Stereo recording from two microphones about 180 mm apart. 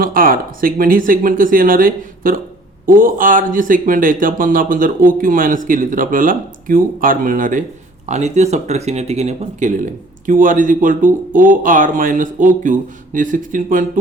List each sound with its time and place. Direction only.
0.0 s speech: 50° right (ahead or behind)